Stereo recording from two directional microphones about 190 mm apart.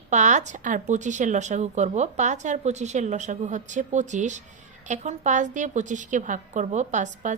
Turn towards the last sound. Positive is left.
turn(degrees=-40)  # may be behind; listen again after turning